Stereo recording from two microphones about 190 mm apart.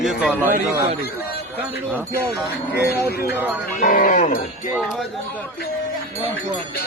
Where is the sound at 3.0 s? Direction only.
10° right (ahead or behind).